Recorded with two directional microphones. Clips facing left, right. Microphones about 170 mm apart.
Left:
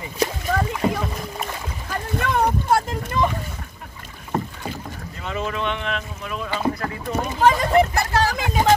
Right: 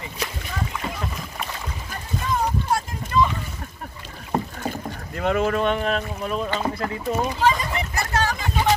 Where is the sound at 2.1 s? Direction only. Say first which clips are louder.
Left 3 dB; 65° left (ahead or behind).